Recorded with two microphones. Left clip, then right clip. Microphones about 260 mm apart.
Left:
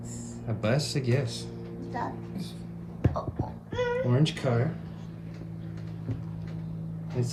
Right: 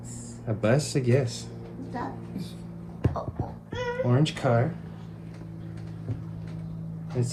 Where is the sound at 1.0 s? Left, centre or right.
Left.